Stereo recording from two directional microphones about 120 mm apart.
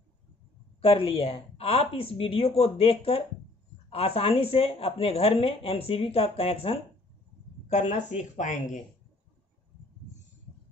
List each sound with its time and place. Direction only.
0.7 s speech: 50° left (ahead or behind)
7.6 s speech: 70° left (ahead or behind); by 8.8 s 90° left